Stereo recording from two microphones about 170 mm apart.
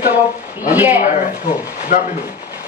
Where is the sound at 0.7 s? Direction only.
10° right (ahead or behind).